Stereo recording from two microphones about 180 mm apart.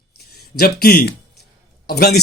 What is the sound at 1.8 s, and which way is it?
Speech, 60° left (ahead or behind).